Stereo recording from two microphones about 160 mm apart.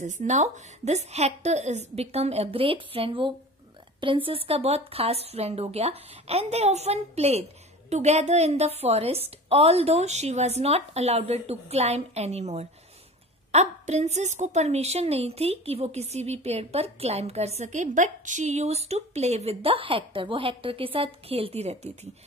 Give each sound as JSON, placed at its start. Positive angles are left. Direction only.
{"t": 0.0, "sound": "a woman's voice", "side_deg": -50}